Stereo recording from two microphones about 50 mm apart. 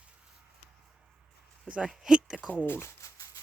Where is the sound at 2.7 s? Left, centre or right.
Left.